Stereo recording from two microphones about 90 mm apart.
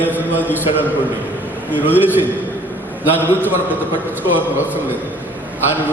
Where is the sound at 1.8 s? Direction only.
20° right (ahead or behind).